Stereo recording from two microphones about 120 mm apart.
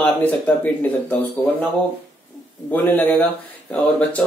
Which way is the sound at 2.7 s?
15° left (ahead or behind).